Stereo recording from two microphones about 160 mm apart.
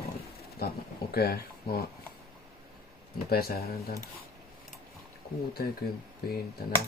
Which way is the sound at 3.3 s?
75° left (ahead or behind).